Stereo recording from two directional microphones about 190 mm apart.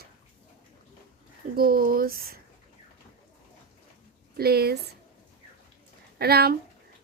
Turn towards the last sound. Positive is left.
turn(degrees=-55)  # may be behind; listen again after turning